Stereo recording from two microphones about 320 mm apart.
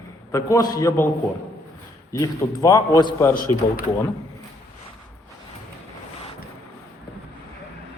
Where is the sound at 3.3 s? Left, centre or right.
Left.